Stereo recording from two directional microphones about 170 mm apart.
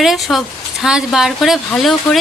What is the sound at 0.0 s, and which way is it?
Speech, centre (ahead or behind).